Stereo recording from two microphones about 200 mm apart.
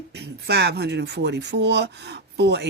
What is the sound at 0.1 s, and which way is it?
Speech, 55° right (ahead or behind).